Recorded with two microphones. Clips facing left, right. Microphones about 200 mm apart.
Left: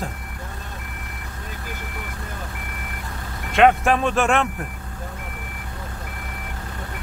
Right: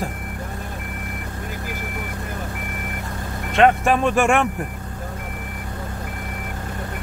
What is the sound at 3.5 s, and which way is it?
Speech, centre (ahead or behind).